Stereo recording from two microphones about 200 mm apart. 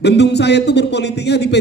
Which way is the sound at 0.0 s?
60° left (ahead or behind).